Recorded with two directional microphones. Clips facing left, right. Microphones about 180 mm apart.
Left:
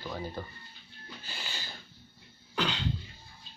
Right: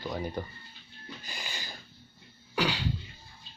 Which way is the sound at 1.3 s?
10° right (ahead or behind).